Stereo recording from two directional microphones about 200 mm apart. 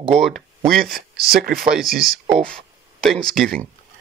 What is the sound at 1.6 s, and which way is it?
Speech, centre (ahead or behind).